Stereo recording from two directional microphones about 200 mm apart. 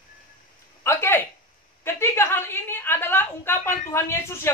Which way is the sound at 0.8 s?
10° left (ahead or behind).